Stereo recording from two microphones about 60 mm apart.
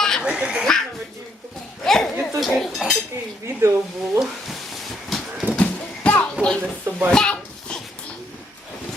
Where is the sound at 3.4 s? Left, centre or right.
Right.